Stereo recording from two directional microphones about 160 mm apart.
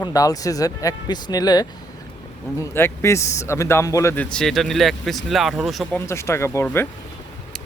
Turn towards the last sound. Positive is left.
turn(degrees=15)  # may be behind; listen again after turning